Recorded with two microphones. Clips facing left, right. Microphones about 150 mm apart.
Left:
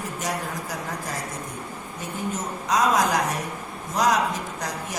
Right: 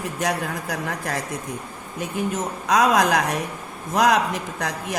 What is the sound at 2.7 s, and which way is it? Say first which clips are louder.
A woman's voice: right 3 dB; 60° right (ahead or behind).